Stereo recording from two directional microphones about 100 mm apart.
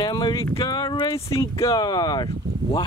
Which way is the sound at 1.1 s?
30° left (ahead or behind).